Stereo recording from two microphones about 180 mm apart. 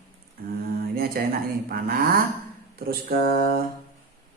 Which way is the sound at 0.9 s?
55° right (ahead or behind).